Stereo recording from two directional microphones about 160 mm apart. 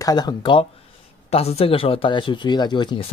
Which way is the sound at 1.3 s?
40° left (ahead or behind).